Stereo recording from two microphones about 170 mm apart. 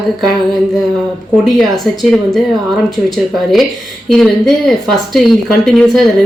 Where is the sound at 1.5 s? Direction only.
Centre (ahead or behind).